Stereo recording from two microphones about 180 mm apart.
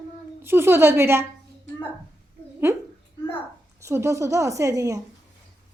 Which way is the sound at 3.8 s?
15° right (ahead or behind).